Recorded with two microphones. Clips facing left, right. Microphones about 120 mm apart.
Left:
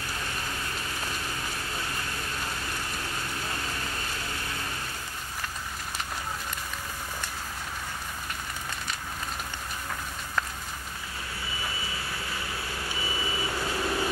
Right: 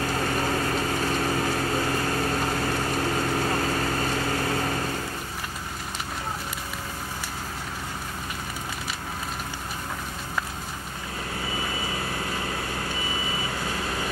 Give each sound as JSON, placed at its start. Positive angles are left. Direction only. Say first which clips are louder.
{"t": 0.0, "sound": "vehicle", "louder": "right 10 dB", "side_deg": -70}